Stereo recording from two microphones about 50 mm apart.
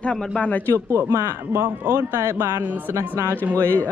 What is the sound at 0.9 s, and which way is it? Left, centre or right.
Speech, right.